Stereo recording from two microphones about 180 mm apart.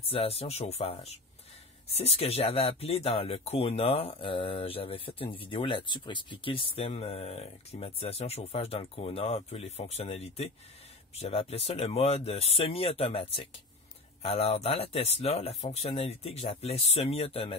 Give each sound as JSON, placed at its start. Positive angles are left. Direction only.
{"t": 0.1, "sound": "speech", "side_deg": 35}